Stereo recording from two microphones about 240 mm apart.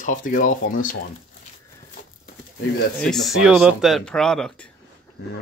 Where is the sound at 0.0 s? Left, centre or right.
Left.